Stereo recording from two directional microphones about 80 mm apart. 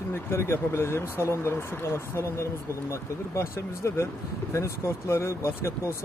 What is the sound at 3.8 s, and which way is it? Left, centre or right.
Speech, left.